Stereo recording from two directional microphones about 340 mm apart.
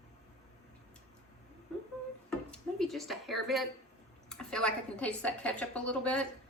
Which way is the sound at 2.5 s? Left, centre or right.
Centre.